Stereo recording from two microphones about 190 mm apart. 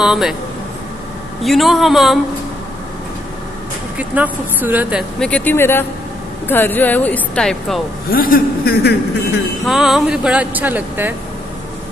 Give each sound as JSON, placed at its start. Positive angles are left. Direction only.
{"t": 0.0, "sound": "speech", "side_deg": 0}
{"t": 1.4, "sound": "speech", "side_deg": 0}
{"t": 4.0, "sound": "speech", "side_deg": -10}
{"t": 5.2, "sound": "speech", "side_deg": 10}
{"t": 8.1, "sound": "a man's voice", "side_deg": 50}
{"t": 9.7, "sound": "speech", "side_deg": 0}